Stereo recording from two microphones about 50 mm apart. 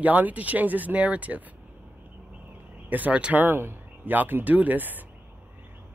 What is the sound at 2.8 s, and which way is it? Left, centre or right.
Speech, right.